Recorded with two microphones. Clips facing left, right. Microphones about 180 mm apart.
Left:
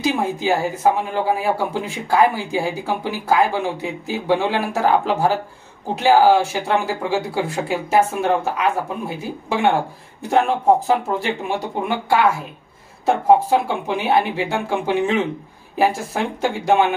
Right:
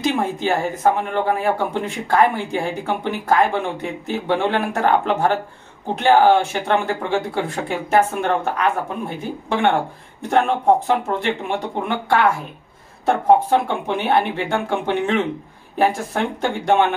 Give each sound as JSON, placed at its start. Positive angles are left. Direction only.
{"t": 0.0, "sound": "a woman's voice", "side_deg": 5}